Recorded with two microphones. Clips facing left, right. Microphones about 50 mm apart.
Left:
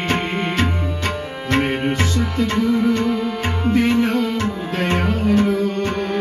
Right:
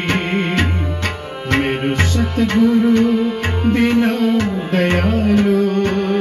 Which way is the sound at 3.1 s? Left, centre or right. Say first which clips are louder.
Right 4 dB; centre.